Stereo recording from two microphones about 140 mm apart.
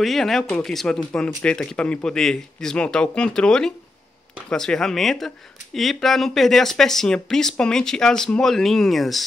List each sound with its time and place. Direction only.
0.0 s speech: centre (ahead or behind)